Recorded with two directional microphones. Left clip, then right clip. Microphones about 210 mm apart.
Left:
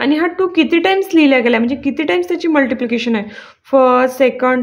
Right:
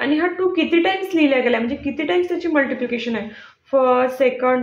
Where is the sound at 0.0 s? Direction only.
55° left (ahead or behind).